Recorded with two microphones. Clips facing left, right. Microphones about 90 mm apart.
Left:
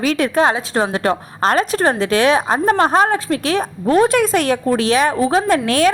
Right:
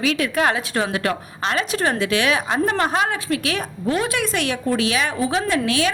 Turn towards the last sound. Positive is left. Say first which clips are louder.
# left 6 dB
turn(degrees=45)  # may be behind; listen again after turning